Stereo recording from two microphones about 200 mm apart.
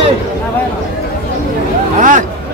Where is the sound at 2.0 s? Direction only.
40° right (ahead or behind).